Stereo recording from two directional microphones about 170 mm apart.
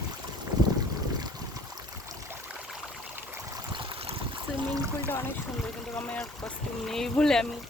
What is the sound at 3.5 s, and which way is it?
Stream, 30° right (ahead or behind).